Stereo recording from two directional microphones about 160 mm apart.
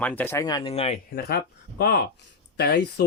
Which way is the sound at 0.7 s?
40° left (ahead or behind).